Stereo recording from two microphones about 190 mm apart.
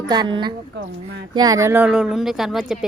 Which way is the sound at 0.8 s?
60° right (ahead or behind).